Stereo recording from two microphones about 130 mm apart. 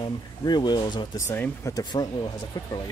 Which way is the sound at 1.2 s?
20° left (ahead or behind).